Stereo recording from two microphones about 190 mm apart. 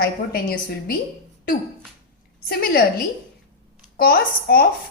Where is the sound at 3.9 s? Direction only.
50° left (ahead or behind).